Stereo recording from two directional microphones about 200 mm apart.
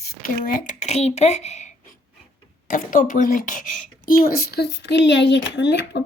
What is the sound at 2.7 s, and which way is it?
A woman's voice, 40° left (ahead or behind).